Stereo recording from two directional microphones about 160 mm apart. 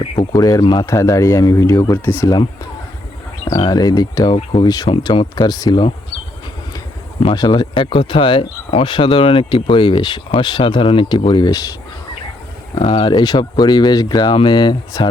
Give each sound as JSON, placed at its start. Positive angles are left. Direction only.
{"t": 0.2, "sound": "speech", "side_deg": 25}
{"t": 3.5, "sound": "speech", "side_deg": 30}
{"t": 7.3, "sound": "speech", "side_deg": 30}
{"t": 12.7, "sound": "speech", "side_deg": 35}